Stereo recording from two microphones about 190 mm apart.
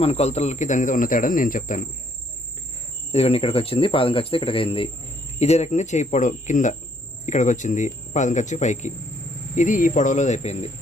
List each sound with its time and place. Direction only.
0.0 s speech: 35° left (ahead or behind)
3.1 s speech: 35° left (ahead or behind)